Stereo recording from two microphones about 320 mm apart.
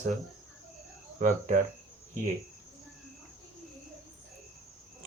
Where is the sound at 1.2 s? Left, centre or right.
Right.